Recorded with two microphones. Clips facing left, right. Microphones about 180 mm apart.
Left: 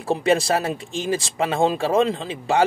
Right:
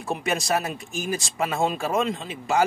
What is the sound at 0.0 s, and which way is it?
Speech, 30° left (ahead or behind).